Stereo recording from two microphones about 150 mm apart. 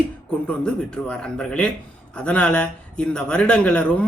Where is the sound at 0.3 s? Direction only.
5° left (ahead or behind).